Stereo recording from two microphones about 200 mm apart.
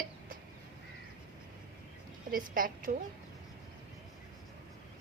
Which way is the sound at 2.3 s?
45° right (ahead or behind).